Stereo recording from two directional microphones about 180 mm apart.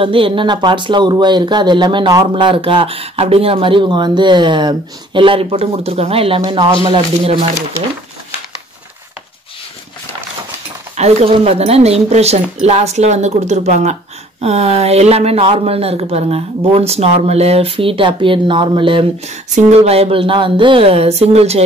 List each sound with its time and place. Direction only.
0.0 s speech: 30° right (ahead or behind)
11.0 s speech: 35° right (ahead or behind)